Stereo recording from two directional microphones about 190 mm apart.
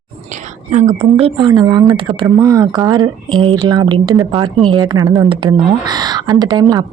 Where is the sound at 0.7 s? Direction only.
40° right (ahead or behind).